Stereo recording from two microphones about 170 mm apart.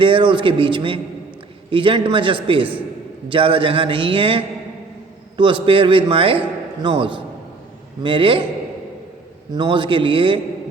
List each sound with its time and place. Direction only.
0.0 s a man's voice: 30° right (ahead or behind)
5.6 s a man's voice: 30° right (ahead or behind)
9.6 s a man's voice: 30° right (ahead or behind)